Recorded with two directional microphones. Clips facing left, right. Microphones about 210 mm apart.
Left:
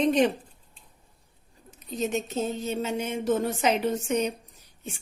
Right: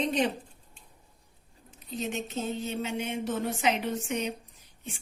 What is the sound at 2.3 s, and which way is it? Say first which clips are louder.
A woman's voice: left 4 dB; 40° left (ahead or behind).